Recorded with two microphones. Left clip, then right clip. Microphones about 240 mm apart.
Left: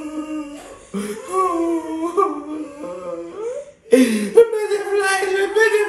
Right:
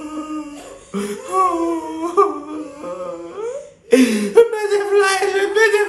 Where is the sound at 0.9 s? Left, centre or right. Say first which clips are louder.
Right 2 dB; centre.